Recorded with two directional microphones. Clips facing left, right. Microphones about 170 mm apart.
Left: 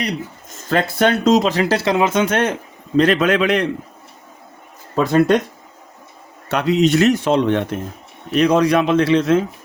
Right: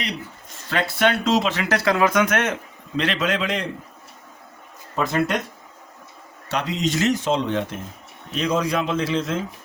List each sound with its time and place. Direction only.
0.5 s speech: 45° left (ahead or behind); by 3.7 s 65° left (ahead or behind)
5.1 s speech: 65° left (ahead or behind)
6.5 s speech: 60° left (ahead or behind)